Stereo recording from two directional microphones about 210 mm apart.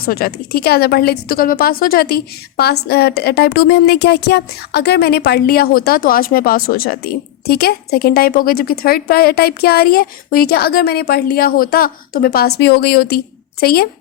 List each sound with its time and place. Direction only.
0.0 s a woman's voice: 45° left (ahead or behind)